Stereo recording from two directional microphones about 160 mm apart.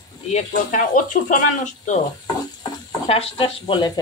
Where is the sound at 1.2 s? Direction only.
55° left (ahead or behind).